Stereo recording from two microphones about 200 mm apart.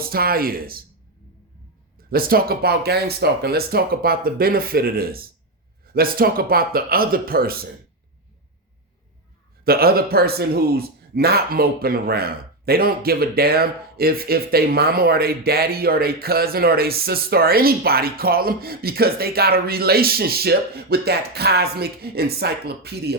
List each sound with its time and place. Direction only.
0.0 s speech: 50° right (ahead or behind)
2.0 s speech: 45° right (ahead or behind)
9.6 s speech: 50° right (ahead or behind)